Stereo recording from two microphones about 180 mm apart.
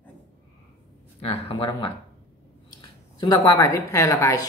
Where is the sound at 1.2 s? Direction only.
30° left (ahead or behind).